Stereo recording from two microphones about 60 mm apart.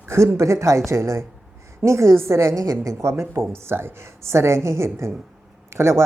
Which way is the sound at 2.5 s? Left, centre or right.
Right.